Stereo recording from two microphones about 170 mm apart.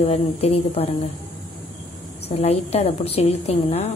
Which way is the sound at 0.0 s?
35° left (ahead or behind).